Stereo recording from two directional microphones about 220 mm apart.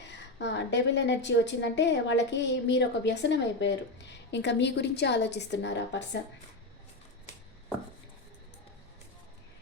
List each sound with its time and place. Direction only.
0.1 s a woman's voice: 50° left (ahead or behind)